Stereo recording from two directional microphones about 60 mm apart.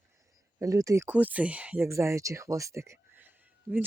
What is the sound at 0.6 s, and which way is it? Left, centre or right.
Speech, right.